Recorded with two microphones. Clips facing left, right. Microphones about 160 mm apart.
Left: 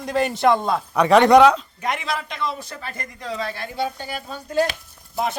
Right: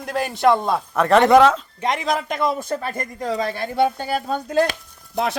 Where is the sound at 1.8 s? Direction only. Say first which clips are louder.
Right 4 dB; 35° right (ahead or behind); by 5.4 s 75° right (ahead or behind).